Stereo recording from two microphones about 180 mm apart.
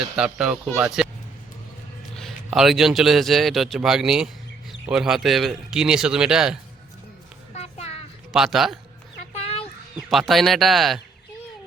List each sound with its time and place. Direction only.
0.2 s a man's voice: 5° right (ahead or behind)
2.1 s a man's voice: centre (ahead or behind)
7.5 s a sound: 35° left (ahead or behind)
8.3 s a man's voice: centre (ahead or behind)
9.3 s a sound: 35° left (ahead or behind)
10.1 s a man's voice: centre (ahead or behind)